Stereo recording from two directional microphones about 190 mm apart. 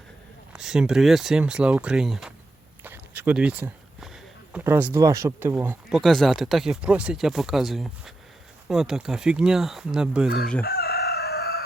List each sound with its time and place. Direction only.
0.5 s speech: 5° right (ahead or behind)
2.8 s a sound: 10° right (ahead or behind)
4.6 s speech: 10° right (ahead or behind)
5.9 s speech: centre (ahead or behind)
10.2 s speech: 55° left (ahead or behind)
10.6 s crowing: 55° left (ahead or behind)